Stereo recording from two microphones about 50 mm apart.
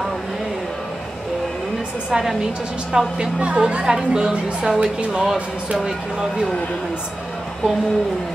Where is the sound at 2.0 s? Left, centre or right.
Centre.